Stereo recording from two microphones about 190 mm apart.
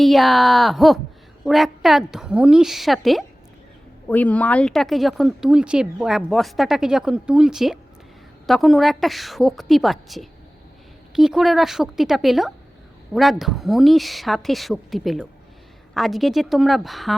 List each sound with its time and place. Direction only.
0.0 s speech: centre (ahead or behind)